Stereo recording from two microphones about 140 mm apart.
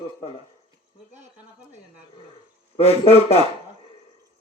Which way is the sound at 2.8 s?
45° left (ahead or behind).